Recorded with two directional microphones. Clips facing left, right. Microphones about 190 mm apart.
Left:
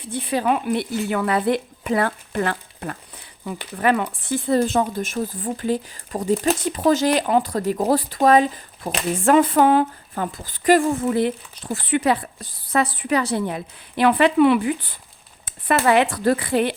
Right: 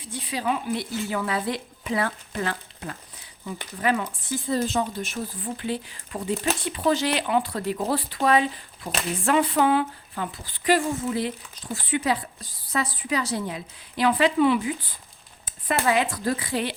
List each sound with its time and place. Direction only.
0.0 s speech: 60° left (ahead or behind)